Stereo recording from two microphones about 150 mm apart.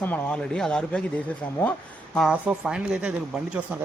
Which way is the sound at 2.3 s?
5° right (ahead or behind).